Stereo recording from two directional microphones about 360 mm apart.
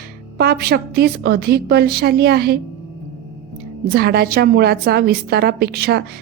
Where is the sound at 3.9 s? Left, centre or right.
Right.